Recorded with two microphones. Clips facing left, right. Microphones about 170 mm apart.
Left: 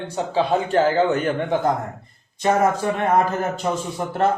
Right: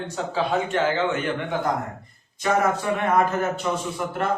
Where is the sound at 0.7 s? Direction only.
40° left (ahead or behind).